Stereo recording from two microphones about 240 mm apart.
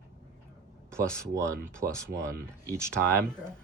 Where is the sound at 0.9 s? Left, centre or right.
Centre.